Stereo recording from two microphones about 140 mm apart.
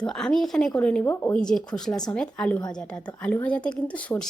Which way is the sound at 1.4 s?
5° left (ahead or behind).